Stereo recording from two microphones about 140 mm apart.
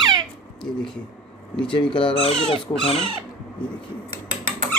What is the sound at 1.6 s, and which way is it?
Speech, 40° left (ahead or behind).